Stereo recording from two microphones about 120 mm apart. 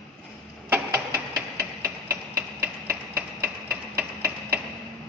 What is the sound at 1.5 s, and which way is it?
Hammer, 20° right (ahead or behind).